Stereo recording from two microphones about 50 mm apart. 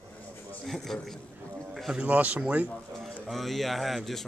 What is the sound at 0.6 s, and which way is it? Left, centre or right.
Speech, centre.